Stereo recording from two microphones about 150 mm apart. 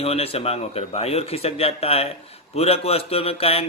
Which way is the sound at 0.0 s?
40° left (ahead or behind).